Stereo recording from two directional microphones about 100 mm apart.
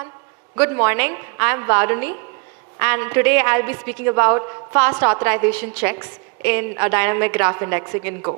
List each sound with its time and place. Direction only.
0.5 s a man's voice: 25° right (ahead or behind)